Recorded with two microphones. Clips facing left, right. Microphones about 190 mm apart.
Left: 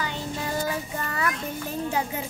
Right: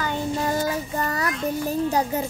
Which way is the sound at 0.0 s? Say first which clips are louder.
Right 6 dB; 45° right (ahead or behind).